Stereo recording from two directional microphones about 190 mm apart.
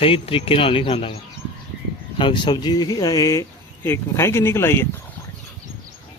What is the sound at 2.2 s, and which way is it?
Speech, 25° left (ahead or behind).